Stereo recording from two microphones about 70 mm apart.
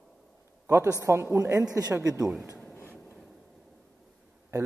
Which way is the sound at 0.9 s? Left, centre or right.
Right.